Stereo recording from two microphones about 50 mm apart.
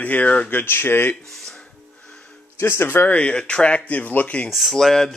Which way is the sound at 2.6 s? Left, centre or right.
Left.